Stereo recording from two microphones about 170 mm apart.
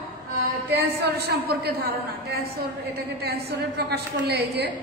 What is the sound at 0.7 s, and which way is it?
Speech, 70° right (ahead or behind).